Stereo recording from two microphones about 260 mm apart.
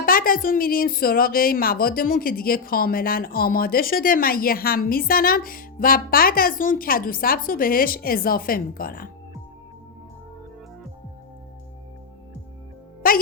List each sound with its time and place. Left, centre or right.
0.0 s a woman's voice: left
13.0 s a child's voice: left